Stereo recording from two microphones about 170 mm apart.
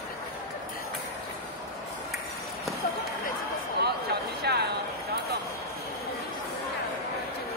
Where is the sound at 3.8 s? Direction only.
75° right (ahead or behind).